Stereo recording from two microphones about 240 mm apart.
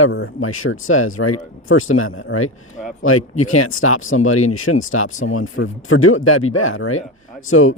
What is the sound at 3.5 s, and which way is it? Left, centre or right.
Speech, left.